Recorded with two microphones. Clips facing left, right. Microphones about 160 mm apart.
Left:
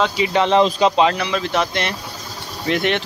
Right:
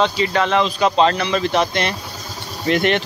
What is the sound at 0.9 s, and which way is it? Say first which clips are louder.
Speech: right 1 dB; 5° left (ahead or behind).